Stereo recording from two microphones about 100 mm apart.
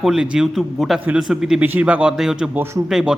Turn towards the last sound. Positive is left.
turn(degrees=-5)  # may be behind; listen again after turning